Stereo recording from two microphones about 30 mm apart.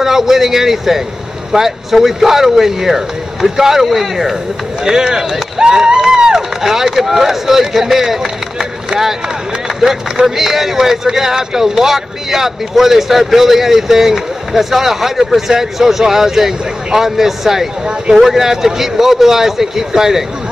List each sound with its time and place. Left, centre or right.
0.0 s speech: centre
4.8 s speech: centre
5.6 s a sound: right
6.6 s speech: centre
9.8 s speech: centre